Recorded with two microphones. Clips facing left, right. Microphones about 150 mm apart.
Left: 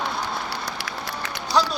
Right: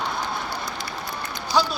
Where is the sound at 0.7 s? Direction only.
90° left.